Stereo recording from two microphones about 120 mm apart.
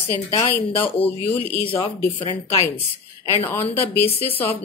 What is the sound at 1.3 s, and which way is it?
Speech, 15° left (ahead or behind).